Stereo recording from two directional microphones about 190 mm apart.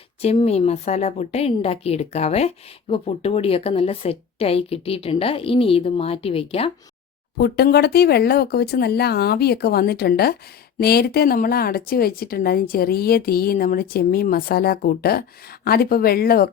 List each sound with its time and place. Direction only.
0.2 s a woman's voice: 30° left (ahead or behind)
7.3 s a woman's voice: 60° left (ahead or behind)